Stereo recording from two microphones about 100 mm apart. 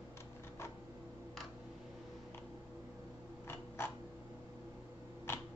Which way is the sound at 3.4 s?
25° left (ahead or behind).